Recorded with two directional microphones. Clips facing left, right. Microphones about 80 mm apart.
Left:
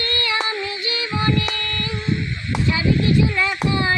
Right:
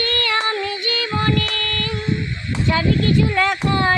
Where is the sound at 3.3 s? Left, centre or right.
Right.